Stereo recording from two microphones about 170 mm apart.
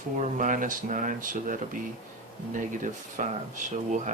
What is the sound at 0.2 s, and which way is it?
Speech, 50° right (ahead or behind).